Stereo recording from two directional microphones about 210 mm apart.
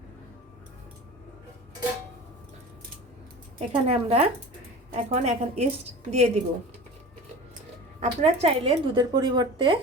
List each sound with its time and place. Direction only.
3.7 s a woman's voice: 30° right (ahead or behind)
8.0 s a woman's voice: 30° right (ahead or behind)